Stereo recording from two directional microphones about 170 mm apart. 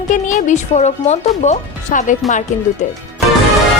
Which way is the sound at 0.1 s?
45° left (ahead or behind).